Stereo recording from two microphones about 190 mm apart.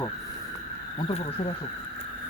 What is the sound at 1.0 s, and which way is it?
Speech, 30° left (ahead or behind).